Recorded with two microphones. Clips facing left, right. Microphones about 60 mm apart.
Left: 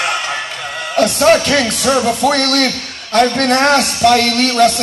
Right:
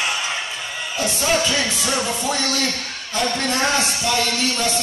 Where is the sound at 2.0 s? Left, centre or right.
Left.